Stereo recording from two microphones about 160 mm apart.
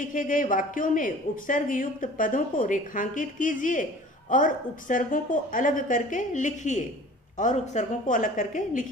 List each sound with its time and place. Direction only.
0.0 s a woman's voice: 55° left (ahead or behind)